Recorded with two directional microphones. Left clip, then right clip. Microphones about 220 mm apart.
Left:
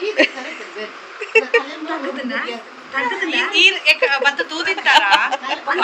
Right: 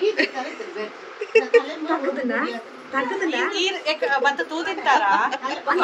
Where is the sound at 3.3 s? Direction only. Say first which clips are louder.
Left 8 dB; 30° right (ahead or behind).